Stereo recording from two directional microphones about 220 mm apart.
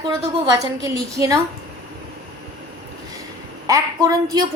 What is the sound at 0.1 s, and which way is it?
A woman's voice, 15° right (ahead or behind).